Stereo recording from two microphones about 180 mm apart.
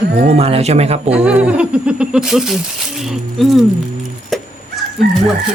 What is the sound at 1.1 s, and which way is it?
Speech, 5° right (ahead or behind).